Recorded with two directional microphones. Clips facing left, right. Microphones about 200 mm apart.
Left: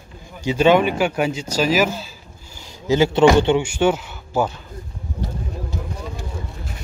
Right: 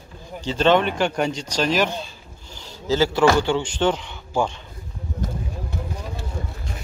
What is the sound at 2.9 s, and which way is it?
Speech, 15° left (ahead or behind).